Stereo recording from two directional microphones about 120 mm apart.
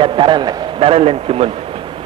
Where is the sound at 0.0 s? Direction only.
45° right (ahead or behind).